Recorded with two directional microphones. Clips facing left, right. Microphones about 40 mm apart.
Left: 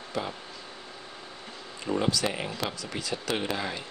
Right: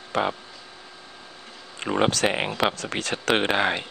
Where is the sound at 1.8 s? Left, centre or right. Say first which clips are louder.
Right 5 dB; right.